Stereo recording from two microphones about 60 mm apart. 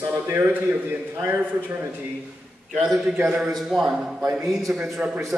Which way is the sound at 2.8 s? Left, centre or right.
Centre.